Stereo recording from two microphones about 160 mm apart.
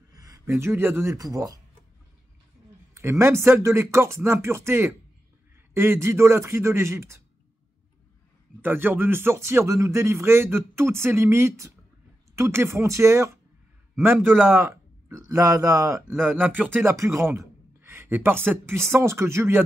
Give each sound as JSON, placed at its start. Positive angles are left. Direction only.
{"t": 0.1, "sound": "speech", "side_deg": -20}
{"t": 2.9, "sound": "speech", "side_deg": -15}
{"t": 8.5, "sound": "a man's voice", "side_deg": -10}